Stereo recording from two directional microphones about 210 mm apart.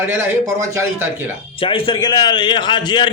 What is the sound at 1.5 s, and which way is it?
A man's voice, 25° left (ahead or behind).